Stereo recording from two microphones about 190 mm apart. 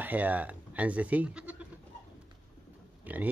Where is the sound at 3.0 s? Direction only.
10° right (ahead or behind).